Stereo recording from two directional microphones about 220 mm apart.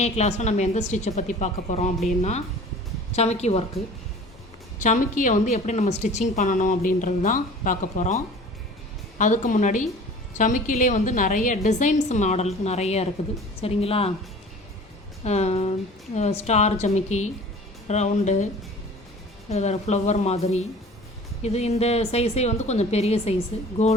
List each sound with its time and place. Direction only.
0.0 s a woman's voice: 30° left (ahead or behind)
3.1 s speech: 30° left (ahead or behind)
4.8 s a woman's voice: 35° left (ahead or behind)
15.2 s a woman's voice: 30° left (ahead or behind)
19.5 s a woman's voice: 30° left (ahead or behind)